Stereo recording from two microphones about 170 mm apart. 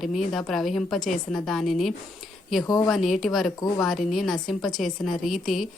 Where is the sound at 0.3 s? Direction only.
Centre (ahead or behind).